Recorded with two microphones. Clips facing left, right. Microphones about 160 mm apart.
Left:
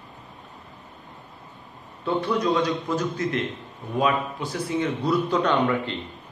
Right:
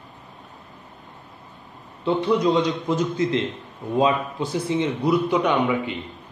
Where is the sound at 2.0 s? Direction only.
20° right (ahead or behind).